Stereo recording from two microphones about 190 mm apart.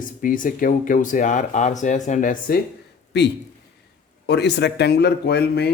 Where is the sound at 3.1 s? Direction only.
60° left (ahead or behind).